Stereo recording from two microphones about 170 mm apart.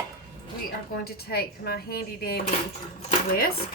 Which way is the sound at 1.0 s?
65° left (ahead or behind).